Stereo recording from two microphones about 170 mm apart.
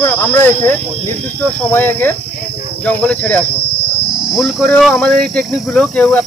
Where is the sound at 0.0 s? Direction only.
10° left (ahead or behind).